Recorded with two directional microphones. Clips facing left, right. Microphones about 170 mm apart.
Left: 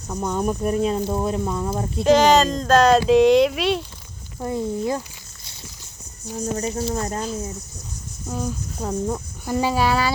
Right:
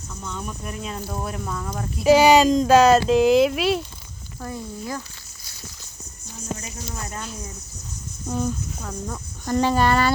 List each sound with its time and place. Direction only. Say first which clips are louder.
0.1 s speech: left 11 dB; 50° left (ahead or behind)
1.0 s speech: left 7 dB; 25° left (ahead or behind)
2.0 s speech: right 1 dB; 10° right (ahead or behind)
4.4 s speech: left 8 dB; 20° left (ahead or behind)
6.4 s speech: left 9 dB; 35° left (ahead or behind)
8.3 s speech: right 2 dB; centre (ahead or behind)
8.8 s speech: left 8 dB; 30° left (ahead or behind)
9.5 s speech: right 1 dB; 10° left (ahead or behind)